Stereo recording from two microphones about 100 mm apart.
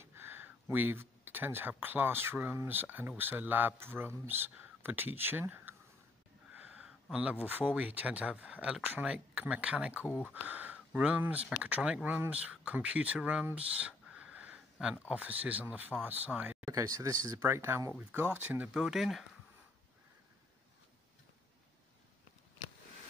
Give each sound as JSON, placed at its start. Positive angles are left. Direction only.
{"t": 0.0, "sound": "speech", "side_deg": -25}
{"t": 10.0, "sound": "speech", "side_deg": 15}
{"t": 10.3, "sound": "speech", "side_deg": -15}
{"t": 13.5, "sound": "a sound", "side_deg": -10}
{"t": 15.0, "sound": "speech", "side_deg": -15}
{"t": 16.6, "sound": "speech", "side_deg": -30}
{"t": 17.4, "sound": "speech", "side_deg": -25}
{"t": 18.7, "sound": "speech", "side_deg": -5}